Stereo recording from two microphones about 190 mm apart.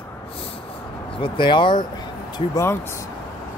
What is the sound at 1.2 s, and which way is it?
Speech, 25° left (ahead or behind).